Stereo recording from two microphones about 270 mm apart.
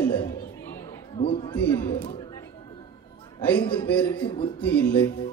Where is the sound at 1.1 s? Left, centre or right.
Centre.